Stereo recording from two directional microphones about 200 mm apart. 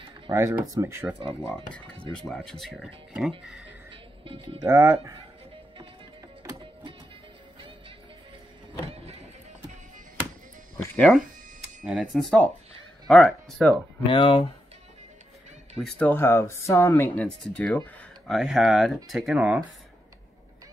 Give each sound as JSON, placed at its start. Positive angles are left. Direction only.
{"t": 0.3, "sound": "speech", "side_deg": -15}
{"t": 1.5, "sound": "speech", "side_deg": 5}
{"t": 3.9, "sound": "music", "side_deg": -25}
{"t": 4.6, "sound": "speech", "side_deg": -15}
{"t": 6.4, "sound": "music", "side_deg": -25}
{"t": 11.0, "sound": "speech", "side_deg": 0}
{"t": 14.0, "sound": "speech", "side_deg": 25}
{"t": 15.8, "sound": "speech", "side_deg": 5}